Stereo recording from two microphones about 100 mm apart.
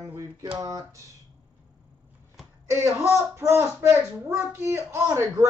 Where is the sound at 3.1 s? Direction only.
25° right (ahead or behind).